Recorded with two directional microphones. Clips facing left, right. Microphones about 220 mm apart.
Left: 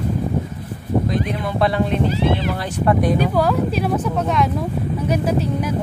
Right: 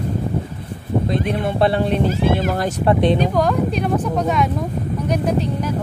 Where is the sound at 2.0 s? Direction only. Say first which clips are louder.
Right 1 dB; 45° right (ahead or behind).